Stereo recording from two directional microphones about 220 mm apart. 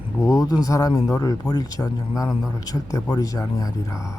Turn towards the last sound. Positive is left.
turn(degrees=15)  # may be behind; listen again after turning